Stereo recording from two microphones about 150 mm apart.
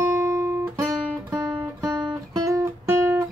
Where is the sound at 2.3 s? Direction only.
20° right (ahead or behind).